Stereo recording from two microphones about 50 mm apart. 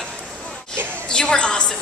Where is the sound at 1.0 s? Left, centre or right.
Centre.